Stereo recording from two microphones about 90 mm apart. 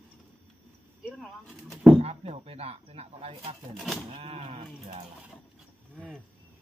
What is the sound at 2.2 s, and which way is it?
Speech, 90° right.